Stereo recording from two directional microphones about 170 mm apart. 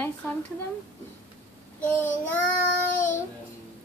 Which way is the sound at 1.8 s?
10° left (ahead or behind).